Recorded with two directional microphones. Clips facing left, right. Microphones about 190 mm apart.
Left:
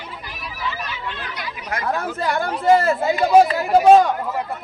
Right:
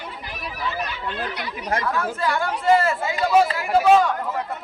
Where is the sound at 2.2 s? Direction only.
45° left (ahead or behind).